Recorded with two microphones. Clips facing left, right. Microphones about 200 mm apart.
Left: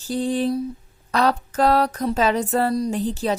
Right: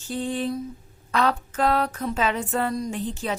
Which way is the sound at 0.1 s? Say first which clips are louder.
Left 5 dB; 35° left (ahead or behind).